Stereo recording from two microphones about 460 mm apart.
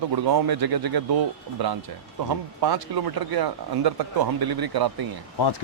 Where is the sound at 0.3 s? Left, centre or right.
Right.